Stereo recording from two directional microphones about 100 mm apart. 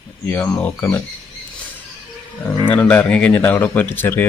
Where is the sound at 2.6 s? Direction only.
15° left (ahead or behind).